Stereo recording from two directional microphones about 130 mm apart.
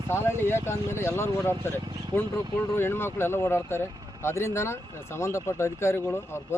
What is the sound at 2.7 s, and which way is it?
Speech, 20° left (ahead or behind).